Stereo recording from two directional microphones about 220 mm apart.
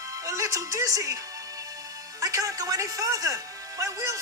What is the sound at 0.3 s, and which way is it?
Speech, 15° right (ahead or behind).